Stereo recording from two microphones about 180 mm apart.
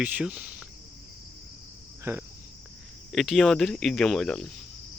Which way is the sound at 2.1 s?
10° right (ahead or behind).